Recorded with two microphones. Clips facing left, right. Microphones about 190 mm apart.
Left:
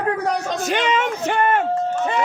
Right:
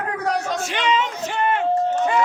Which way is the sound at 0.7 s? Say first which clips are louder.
Left 5 dB; 50° left (ahead or behind).